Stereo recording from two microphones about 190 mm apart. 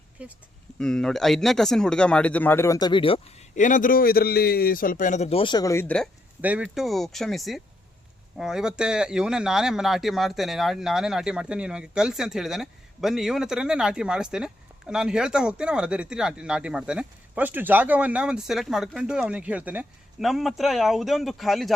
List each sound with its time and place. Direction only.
0.2 s speech: 5° right (ahead or behind); by 3.4 s 30° left (ahead or behind)
3.5 s a man's voice: 40° left (ahead or behind); by 5.8 s 20° left (ahead or behind)
6.4 s speech: 5° right (ahead or behind)